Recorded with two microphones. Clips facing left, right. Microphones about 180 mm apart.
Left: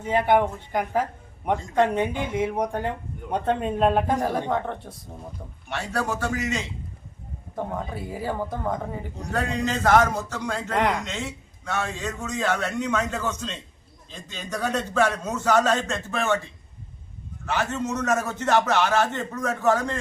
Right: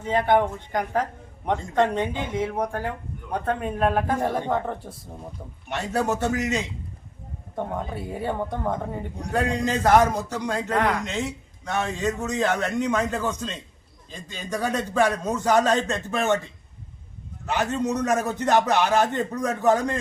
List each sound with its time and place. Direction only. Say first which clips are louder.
0.0 s speech: even; 10° left (ahead or behind)
4.2 s speech: even; centre (ahead or behind)
5.7 s a man's voice: right 3 dB; 20° right (ahead or behind)
7.5 s speech: right 1 dB; centre (ahead or behind)
9.6 s a man's voice: right 1 dB; 10° right (ahead or behind)
10.8 s speech: left 1 dB; 15° left (ahead or behind)
12.2 s a man's voice: left 1 dB; 15° right (ahead or behind)
17.4 s a man's voice: right 2 dB; 15° right (ahead or behind)